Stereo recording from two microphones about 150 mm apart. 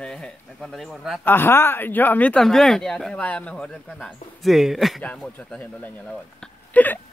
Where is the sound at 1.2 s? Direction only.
15° left (ahead or behind).